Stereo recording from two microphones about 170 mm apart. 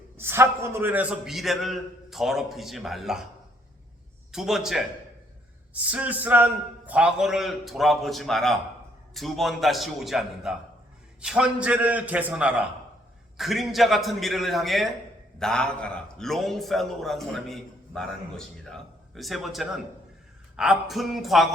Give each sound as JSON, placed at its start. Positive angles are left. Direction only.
{"t": 0.2, "sound": "a man's voice", "side_deg": -15}
{"t": 4.3, "sound": "a man's voice", "side_deg": 0}